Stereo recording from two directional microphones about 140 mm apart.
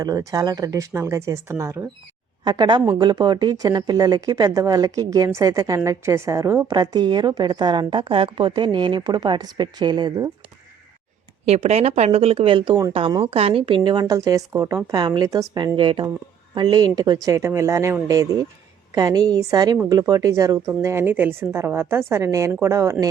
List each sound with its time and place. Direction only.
0.0 s speech: 25° right (ahead or behind)
2.4 s speech: 30° right (ahead or behind)
11.4 s a woman's voice: 50° right (ahead or behind); by 17.9 s 20° right (ahead or behind)
18.9 s speech: 25° right (ahead or behind)